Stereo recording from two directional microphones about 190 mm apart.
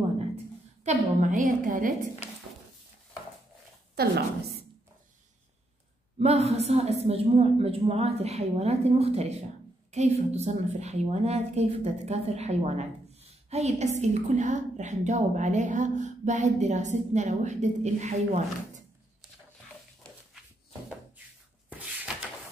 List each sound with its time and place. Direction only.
0.8 s a woman's voice: 40° right (ahead or behind)
3.9 s a woman's voice: 55° right (ahead or behind)
6.1 s a woman's voice: 35° right (ahead or behind)
21.6 s a sound: 5° right (ahead or behind)